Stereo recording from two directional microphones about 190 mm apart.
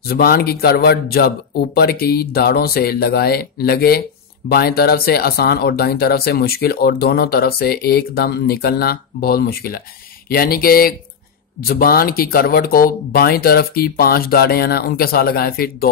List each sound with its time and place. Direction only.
0.1 s speech: 55° left (ahead or behind)